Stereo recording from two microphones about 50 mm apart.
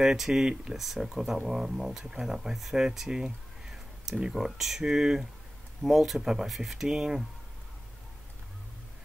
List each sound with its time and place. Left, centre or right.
0.0 s speech: centre